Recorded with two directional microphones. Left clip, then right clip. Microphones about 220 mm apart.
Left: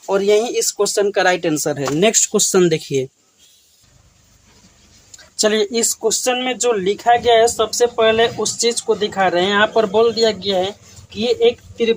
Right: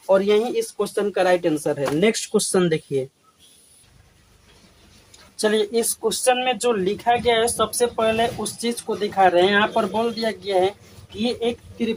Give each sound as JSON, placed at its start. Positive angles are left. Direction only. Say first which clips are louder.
{"t": 0.1, "sound": "speech", "louder": "left 2 dB", "side_deg": 50}
{"t": 5.4, "sound": "speech", "louder": "left 4 dB", "side_deg": 40}